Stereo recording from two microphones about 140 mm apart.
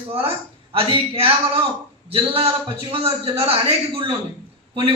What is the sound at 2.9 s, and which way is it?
A man's voice, 40° right (ahead or behind).